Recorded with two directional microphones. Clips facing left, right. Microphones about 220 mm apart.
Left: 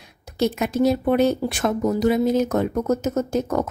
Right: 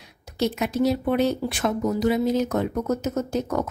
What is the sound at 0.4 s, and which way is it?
A woman's voice, 50° left (ahead or behind).